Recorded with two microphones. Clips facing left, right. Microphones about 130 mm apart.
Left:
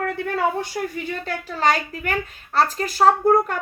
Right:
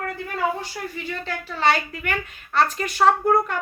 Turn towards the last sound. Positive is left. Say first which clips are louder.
# left 2 dB
turn(degrees=35)  # may be behind; listen again after turning